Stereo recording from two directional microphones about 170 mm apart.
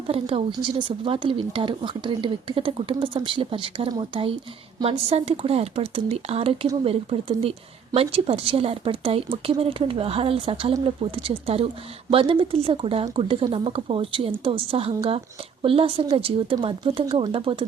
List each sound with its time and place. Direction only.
0.1 s speech: 30° right (ahead or behind)